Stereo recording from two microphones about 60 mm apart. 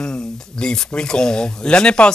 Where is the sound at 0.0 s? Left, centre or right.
Centre.